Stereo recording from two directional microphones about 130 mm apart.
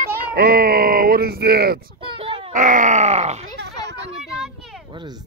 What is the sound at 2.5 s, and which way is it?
Groan, 75° right (ahead or behind).